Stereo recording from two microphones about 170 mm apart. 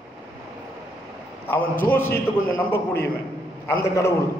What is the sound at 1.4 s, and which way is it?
A man's voice, 10° left (ahead or behind).